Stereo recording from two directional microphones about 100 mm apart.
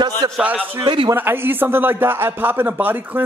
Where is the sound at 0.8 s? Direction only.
60° right (ahead or behind).